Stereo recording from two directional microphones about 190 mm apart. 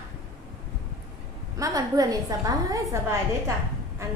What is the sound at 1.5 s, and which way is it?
A woman's voice, 20° right (ahead or behind).